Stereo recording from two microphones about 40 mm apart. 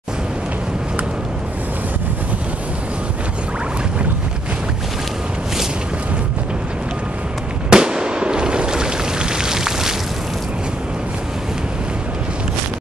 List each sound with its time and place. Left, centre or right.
7.7 s fireworks: right